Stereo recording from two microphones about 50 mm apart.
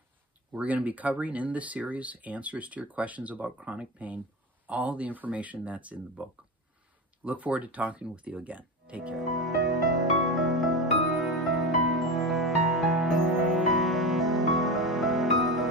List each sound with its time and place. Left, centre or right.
0.5 s speech: right
7.2 s speech: right
9.1 s music: centre